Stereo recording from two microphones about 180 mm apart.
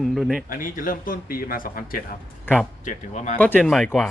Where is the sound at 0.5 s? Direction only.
50° left (ahead or behind).